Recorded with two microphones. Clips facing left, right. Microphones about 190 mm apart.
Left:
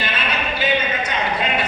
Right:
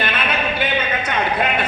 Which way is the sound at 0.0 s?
55° right (ahead or behind).